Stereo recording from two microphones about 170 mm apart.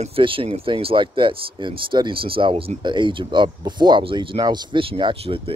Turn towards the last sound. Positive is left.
turn(degrees=-30)  # may be behind; listen again after turning